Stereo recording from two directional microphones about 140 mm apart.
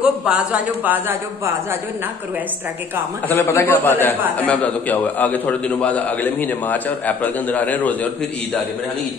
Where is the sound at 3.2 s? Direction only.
15° left (ahead or behind).